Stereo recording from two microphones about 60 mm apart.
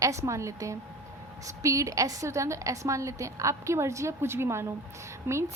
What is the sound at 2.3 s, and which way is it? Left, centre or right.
A woman's voice, right.